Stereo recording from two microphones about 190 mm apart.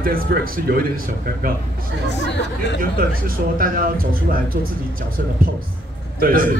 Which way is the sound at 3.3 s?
50° right (ahead or behind).